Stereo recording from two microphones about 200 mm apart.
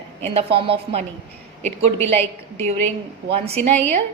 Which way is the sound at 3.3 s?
30° right (ahead or behind).